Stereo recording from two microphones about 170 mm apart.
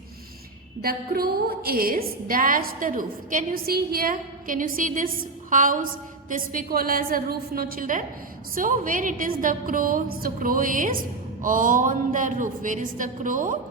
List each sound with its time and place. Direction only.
0.8 s a woman's voice: 60° right (ahead or behind)